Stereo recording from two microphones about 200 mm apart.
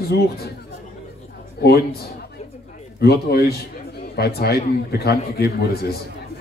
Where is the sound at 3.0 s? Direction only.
50° left (ahead or behind).